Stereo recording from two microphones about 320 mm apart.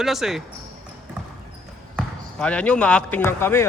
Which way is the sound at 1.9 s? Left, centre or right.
Centre.